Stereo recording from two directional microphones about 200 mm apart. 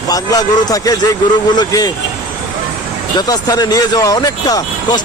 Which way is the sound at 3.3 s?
20° left (ahead or behind).